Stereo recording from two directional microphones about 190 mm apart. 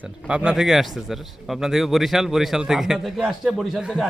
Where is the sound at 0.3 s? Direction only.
5° right (ahead or behind).